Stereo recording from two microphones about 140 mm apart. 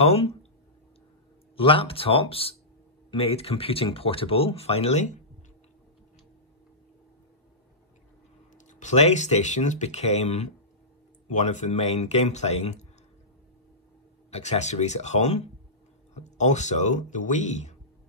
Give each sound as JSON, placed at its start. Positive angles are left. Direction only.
{"t": 0.0, "sound": "speech", "side_deg": 50}
{"t": 1.6, "sound": "speech", "side_deg": 40}
{"t": 8.5, "sound": "speech", "side_deg": 60}
{"t": 14.3, "sound": "speech", "side_deg": 55}